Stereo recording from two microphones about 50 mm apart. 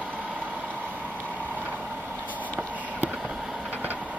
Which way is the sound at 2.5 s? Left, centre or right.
Right.